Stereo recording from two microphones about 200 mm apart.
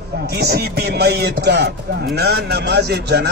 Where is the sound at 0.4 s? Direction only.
50° right (ahead or behind).